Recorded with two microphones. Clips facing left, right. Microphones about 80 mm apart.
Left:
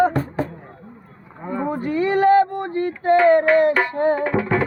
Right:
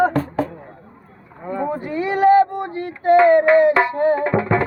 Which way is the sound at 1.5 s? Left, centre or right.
Centre.